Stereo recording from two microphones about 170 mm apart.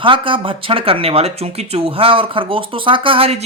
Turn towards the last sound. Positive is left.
turn(degrees=-35)  # may be behind; listen again after turning